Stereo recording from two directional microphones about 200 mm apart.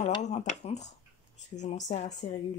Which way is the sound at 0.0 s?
35° left (ahead or behind).